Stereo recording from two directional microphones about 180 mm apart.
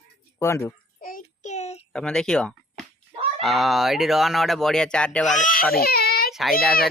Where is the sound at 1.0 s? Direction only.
50° left (ahead or behind).